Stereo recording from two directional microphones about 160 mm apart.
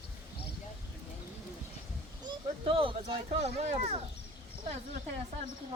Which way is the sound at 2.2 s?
35° right (ahead or behind).